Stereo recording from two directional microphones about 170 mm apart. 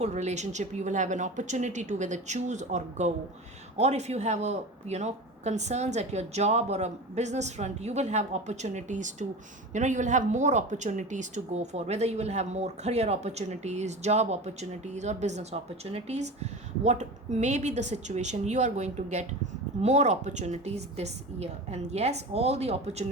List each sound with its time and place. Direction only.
0.0 s a woman's voice: 40° right (ahead or behind)